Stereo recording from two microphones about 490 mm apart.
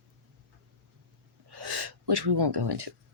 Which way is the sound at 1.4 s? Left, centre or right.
Right.